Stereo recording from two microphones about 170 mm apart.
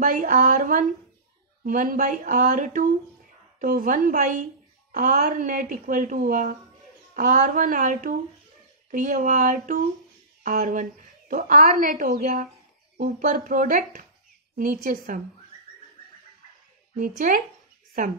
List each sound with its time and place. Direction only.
0.0 s a woman's voice: 55° right (ahead or behind)
16.9 s a woman's voice: 50° right (ahead or behind)